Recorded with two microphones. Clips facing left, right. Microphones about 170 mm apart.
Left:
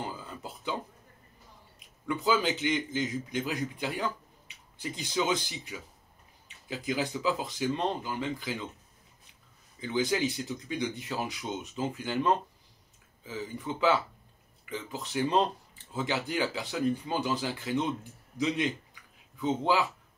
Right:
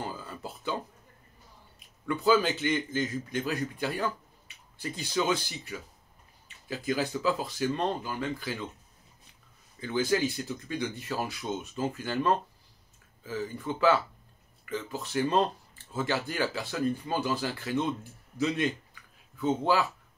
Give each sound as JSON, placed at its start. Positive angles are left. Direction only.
{"t": 0.1, "sound": "a sound", "side_deg": 15}
{"t": 2.0, "sound": "speech", "side_deg": 15}
{"t": 9.8, "sound": "speech", "side_deg": 20}